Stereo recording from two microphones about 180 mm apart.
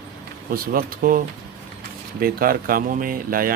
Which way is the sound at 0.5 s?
55° right (ahead or behind).